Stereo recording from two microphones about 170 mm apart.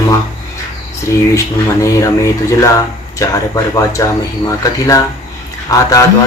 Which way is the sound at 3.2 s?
20° left (ahead or behind).